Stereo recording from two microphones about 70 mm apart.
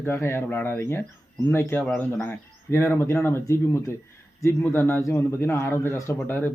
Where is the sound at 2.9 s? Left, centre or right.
Left.